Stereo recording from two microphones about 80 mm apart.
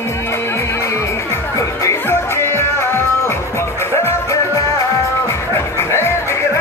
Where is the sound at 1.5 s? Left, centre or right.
Left.